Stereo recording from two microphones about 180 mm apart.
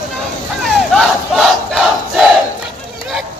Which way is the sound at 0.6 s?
Centre (ahead or behind).